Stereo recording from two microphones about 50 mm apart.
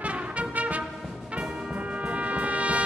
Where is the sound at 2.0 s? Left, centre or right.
Right.